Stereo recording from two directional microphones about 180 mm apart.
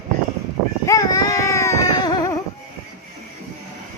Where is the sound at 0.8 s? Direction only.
20° left (ahead or behind).